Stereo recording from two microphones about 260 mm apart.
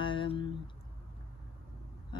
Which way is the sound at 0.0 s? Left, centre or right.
Centre.